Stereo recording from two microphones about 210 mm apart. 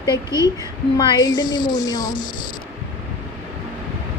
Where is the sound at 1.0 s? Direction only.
20° left (ahead or behind).